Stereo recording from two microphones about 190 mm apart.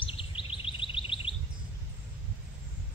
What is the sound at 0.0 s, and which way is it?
Bird vocalization, 25° left (ahead or behind).